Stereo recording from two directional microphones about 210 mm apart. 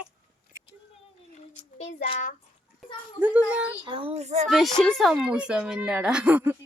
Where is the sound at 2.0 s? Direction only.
25° left (ahead or behind).